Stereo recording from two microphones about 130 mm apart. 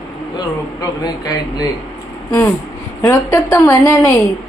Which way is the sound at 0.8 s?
30° left (ahead or behind).